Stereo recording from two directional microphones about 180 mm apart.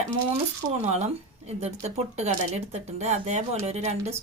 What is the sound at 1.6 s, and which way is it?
Speech, 35° right (ahead or behind).